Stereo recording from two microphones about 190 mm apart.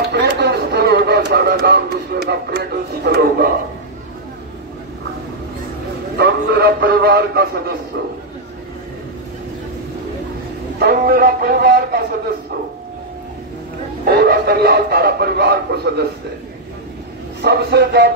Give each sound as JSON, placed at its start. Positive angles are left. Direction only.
{"t": 0.1, "sound": "a sound", "side_deg": -60}
{"t": 6.1, "sound": "a man's voice", "side_deg": -60}
{"t": 10.8, "sound": "speech", "side_deg": -55}
{"t": 14.0, "sound": "speech", "side_deg": -55}
{"t": 17.4, "sound": "speech", "side_deg": -60}